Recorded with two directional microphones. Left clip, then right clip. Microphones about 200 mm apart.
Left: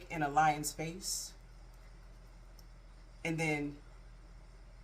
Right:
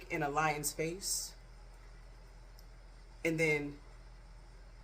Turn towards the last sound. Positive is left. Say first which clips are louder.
# right 4 dB
turn(degrees=-20)  # may be behind; listen again after turning